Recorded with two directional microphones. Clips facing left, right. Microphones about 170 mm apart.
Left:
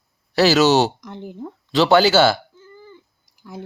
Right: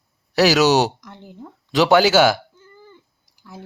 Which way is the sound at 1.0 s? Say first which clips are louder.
Left 7 dB; 25° left (ahead or behind).